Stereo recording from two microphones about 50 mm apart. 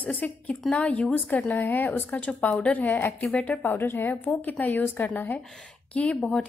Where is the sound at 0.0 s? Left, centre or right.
Left.